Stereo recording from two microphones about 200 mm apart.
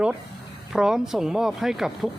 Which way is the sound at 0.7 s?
5° right (ahead or behind).